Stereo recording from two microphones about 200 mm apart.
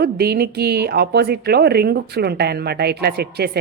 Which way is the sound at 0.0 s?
50° right (ahead or behind).